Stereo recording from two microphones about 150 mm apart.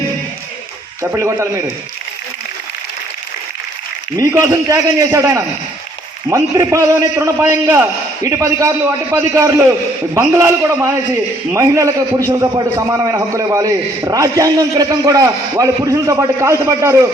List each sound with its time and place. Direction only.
1.0 s a man's voice: 15° right (ahead or behind)
4.3 s a man's voice: 20° right (ahead or behind)